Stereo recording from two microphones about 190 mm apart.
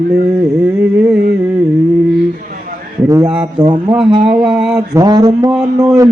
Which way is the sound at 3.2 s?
5° right (ahead or behind).